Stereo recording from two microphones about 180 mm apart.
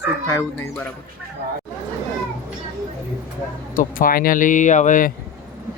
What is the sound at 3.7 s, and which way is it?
Speech, 50° left (ahead or behind).